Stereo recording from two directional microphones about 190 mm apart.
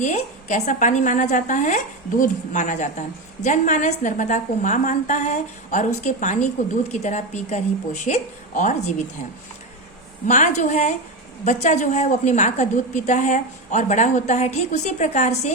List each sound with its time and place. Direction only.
0.0 s a woman's voice: 40° left (ahead or behind)
10.2 s a woman's voice: 40° left (ahead or behind)